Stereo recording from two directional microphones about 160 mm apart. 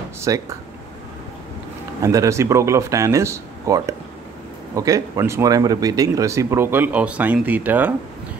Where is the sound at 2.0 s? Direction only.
20° right (ahead or behind).